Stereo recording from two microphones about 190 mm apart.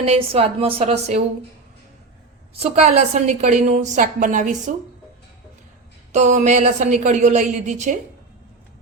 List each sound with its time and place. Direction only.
0.0 s a woman's voice: 30° right (ahead or behind)
2.6 s a woman's voice: 35° right (ahead or behind)
6.1 s a woman's voice: 40° right (ahead or behind)